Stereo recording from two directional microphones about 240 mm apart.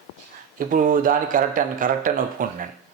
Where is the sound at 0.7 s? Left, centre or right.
Right.